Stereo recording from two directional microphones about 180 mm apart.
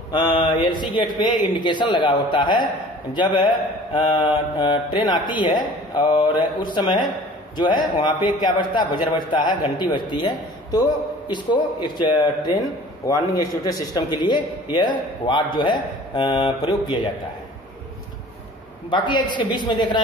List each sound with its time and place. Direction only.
0.1 s a man's voice: 25° left (ahead or behind)
18.9 s a man's voice: 25° left (ahead or behind)